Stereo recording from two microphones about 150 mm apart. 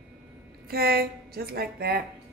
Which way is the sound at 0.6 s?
90° right.